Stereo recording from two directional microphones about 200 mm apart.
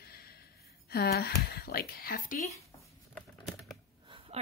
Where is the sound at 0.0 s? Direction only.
50° left (ahead or behind).